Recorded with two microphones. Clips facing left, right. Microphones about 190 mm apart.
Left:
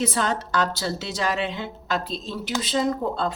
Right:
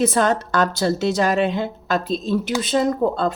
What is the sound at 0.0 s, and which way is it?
A woman's voice, 50° right (ahead or behind).